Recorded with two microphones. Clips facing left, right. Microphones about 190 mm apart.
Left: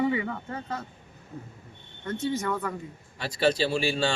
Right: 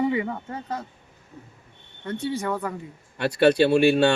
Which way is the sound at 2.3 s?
15° right (ahead or behind).